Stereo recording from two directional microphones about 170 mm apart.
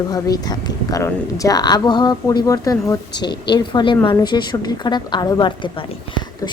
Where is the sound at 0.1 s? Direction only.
25° left (ahead or behind).